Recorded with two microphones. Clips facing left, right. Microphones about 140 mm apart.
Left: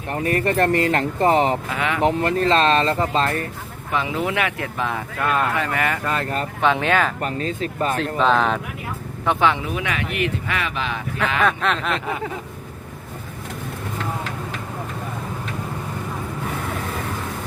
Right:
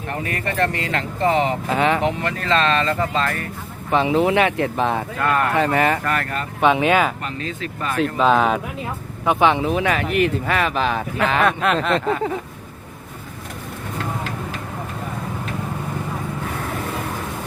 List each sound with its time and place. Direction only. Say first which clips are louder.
0.1 s speech: left 6 dB; 35° left (ahead or behind)
1.7 s speech: right 6 dB; 30° right (ahead or behind)
2.0 s speech: left 4 dB; 35° left (ahead or behind)
3.9 s speech: right 6 dB; 25° right (ahead or behind)
5.2 s speech: right 1 dB; 20° left (ahead or behind)
5.5 s speech: right 5 dB; 30° right (ahead or behind)
6.1 s speech: right 1 dB; 20° left (ahead or behind)
6.6 s speech: right 3 dB; 10° right (ahead or behind)
7.2 s speech: left 4 dB; 40° left (ahead or behind)
8.2 s speech: right 2 dB; 10° right (ahead or behind)
9.5 s speech: right 4 dB; 25° right (ahead or behind)
9.8 s speech: right 5 dB; 40° right (ahead or behind)
11.4 s a sound: right 2 dB; 5° right (ahead or behind)